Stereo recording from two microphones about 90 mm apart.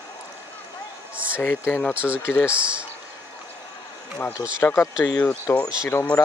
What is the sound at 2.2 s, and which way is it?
Speech, 25° left (ahead or behind).